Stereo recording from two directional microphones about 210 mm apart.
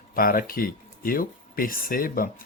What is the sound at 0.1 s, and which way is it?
Speech, 45° left (ahead or behind).